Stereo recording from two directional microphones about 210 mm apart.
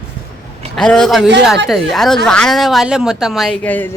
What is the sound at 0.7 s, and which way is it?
Speech, 5° left (ahead or behind).